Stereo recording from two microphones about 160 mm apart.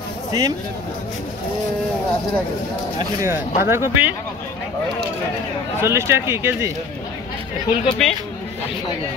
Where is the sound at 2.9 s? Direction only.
20° right (ahead or behind).